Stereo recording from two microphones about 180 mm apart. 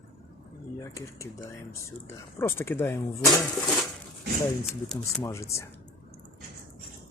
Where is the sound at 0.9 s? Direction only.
15° left (ahead or behind).